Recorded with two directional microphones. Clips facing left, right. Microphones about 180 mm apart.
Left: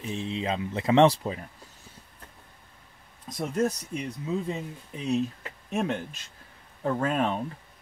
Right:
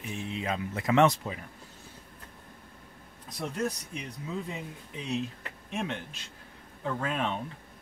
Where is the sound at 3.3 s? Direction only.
45° left (ahead or behind).